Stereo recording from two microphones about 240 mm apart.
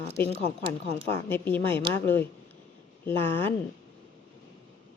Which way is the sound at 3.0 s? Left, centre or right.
Centre.